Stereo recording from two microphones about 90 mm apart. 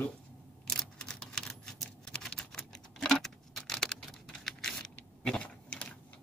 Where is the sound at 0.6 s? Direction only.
5° left (ahead or behind).